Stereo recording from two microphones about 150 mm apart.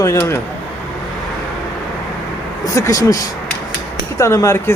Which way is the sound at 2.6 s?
20° left (ahead or behind).